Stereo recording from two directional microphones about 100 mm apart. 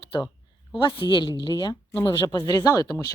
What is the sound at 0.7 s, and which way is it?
Speech, 55° left (ahead or behind).